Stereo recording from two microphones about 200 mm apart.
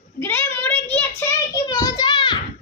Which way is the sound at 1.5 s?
20° left (ahead or behind).